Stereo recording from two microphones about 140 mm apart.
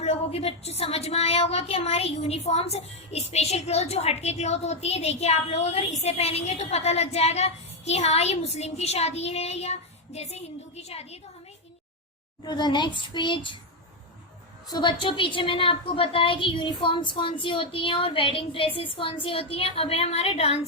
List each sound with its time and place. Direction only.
0.0 s a woman's voice: 50° left (ahead or behind)
12.4 s a woman's voice: 30° left (ahead or behind)
14.7 s a woman's voice: 30° left (ahead or behind)